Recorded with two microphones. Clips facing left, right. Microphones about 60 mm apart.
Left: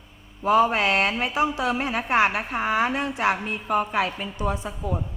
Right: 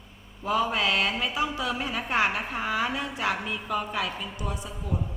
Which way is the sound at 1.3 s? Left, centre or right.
Left.